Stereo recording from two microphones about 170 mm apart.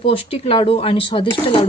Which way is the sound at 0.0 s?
30° left (ahead or behind).